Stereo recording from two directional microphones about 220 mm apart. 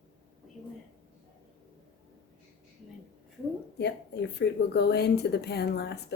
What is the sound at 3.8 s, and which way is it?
Speech, 50° left (ahead or behind).